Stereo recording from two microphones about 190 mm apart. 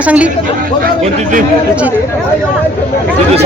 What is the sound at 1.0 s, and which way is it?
Speech, 35° right (ahead or behind).